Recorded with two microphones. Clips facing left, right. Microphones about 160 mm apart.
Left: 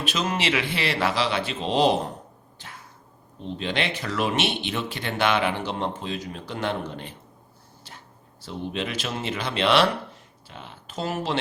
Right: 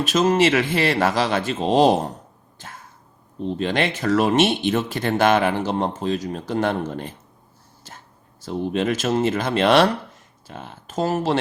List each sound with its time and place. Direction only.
0.0 s speech: 45° right (ahead or behind)
2.6 s dog: 45° right (ahead or behind)
3.6 s speech: 45° right (ahead or behind)